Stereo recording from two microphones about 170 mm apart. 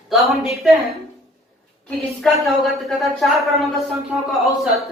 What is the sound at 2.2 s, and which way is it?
A man's voice, centre (ahead or behind).